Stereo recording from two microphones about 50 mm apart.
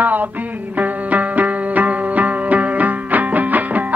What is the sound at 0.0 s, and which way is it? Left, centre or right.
Music, right.